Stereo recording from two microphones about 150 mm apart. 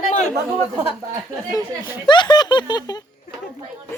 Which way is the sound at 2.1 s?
30° left (ahead or behind).